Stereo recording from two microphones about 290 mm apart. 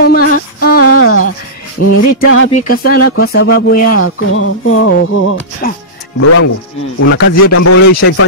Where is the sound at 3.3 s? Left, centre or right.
Left.